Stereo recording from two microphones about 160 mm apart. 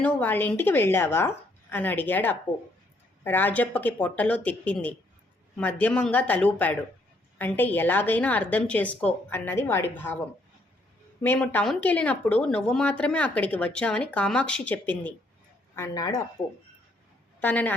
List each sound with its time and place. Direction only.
0.0 s speech: 10° left (ahead or behind)
15.7 s speech: 20° left (ahead or behind)
17.4 s speech: 10° left (ahead or behind)